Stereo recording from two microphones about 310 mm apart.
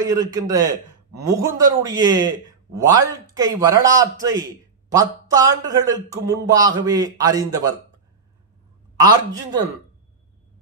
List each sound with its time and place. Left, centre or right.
0.0 s a man's voice: centre
8.9 s a man's voice: centre